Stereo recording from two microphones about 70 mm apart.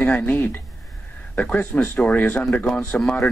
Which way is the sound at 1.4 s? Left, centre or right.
Left.